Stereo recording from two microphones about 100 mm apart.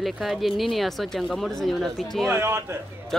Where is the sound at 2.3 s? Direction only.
25° right (ahead or behind).